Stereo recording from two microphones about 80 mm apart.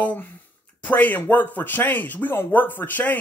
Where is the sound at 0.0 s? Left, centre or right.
Centre.